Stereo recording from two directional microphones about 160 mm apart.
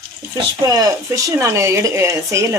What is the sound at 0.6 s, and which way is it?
Speech, 20° right (ahead or behind).